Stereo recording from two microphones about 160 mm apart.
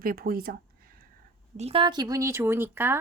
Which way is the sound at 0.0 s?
65° right (ahead or behind).